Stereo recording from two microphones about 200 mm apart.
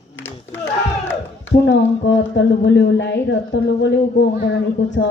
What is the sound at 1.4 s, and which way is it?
Speech, 60° left (ahead or behind).